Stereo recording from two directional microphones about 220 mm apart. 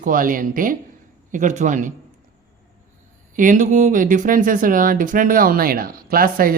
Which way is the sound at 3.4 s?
35° right (ahead or behind).